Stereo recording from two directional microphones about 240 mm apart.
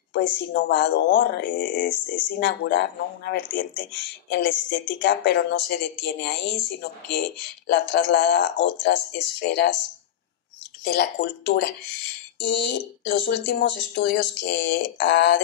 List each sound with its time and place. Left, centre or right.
0.1 s speech: left
10.8 s speech: left